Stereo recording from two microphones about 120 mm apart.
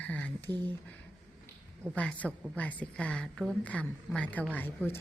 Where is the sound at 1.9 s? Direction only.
10° left (ahead or behind).